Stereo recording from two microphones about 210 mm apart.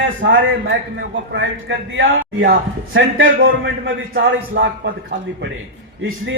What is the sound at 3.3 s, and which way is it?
A man's voice, 45° right (ahead or behind).